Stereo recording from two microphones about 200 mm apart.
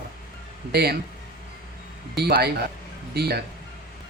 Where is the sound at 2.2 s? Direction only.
55° right (ahead or behind).